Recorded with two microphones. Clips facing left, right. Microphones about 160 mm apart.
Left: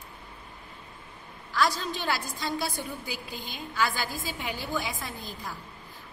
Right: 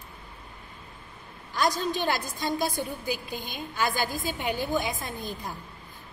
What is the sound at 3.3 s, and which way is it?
Speech, 50° right (ahead or behind).